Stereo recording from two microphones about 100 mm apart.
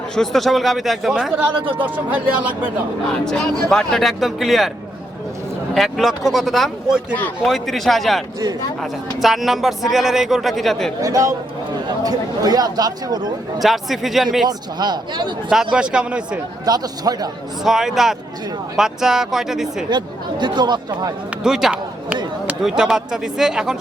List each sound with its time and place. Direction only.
0.2 s speech: centre (ahead or behind)
1.8 s speech: 15° right (ahead or behind)
3.2 s speech: 5° left (ahead or behind)
5.7 s speech: centre (ahead or behind)
11.0 s speech: 35° right (ahead or behind)
13.6 s speech: centre (ahead or behind)
14.4 s speech: 45° right (ahead or behind)
15.7 s speech: 10° right (ahead or behind)
16.6 s speech: 40° right (ahead or behind)
17.6 s speech: 5° right (ahead or behind)
19.9 s speech: 45° right (ahead or behind)
21.4 s speech: 5° right (ahead or behind)